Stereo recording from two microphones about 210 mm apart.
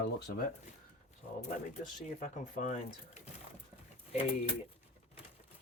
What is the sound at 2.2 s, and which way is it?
Speech, 35° left (ahead or behind).